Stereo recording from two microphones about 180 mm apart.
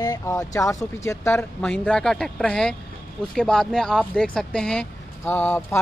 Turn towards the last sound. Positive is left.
turn(degrees=10)  # may be behind; listen again after turning